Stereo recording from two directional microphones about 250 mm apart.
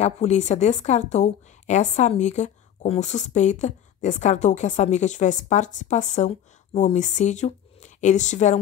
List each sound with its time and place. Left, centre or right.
0.0 s a woman's voice: left